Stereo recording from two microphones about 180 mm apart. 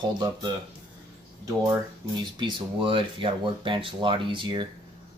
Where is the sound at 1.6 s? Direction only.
25° right (ahead or behind).